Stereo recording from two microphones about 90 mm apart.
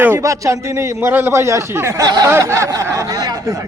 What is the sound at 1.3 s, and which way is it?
A man's voice, 35° right (ahead or behind).